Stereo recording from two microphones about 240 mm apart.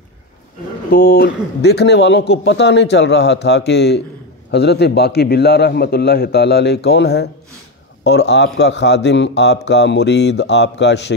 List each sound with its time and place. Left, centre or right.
0.8 s a man's voice: left